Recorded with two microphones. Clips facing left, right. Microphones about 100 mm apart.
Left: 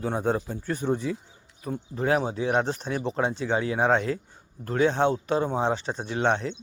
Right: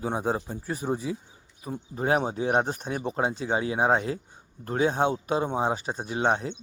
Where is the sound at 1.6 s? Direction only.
Centre (ahead or behind).